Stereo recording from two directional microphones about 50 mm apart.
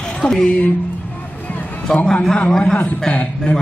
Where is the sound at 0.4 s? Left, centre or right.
Left.